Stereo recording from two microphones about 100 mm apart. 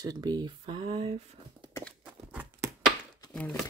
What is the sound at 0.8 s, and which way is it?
Speech, 65° right (ahead or behind).